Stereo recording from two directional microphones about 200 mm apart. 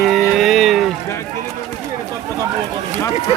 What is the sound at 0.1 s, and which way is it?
Music, centre (ahead or behind).